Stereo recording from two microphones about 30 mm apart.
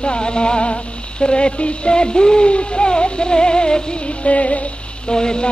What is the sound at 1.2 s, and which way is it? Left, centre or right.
Speech, left.